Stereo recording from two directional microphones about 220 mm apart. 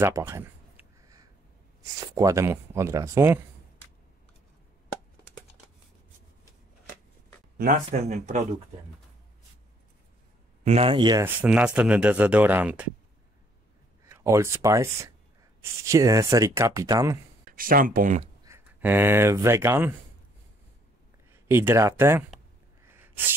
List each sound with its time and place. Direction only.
0.0 s a sound: 10° right (ahead or behind)
2.0 s speech: 15° right (ahead or behind)
7.5 s speech: 40° right (ahead or behind)
10.6 s speech: 30° right (ahead or behind)
11.2 s speech: 5° right (ahead or behind)
14.0 s speech: 10° right (ahead or behind)
17.5 s speech: 40° right (ahead or behind)
18.4 s speech: 10° right (ahead or behind)
21.3 s speech: 10° right (ahead or behind)
22.8 s sneeze: 10° right (ahead or behind)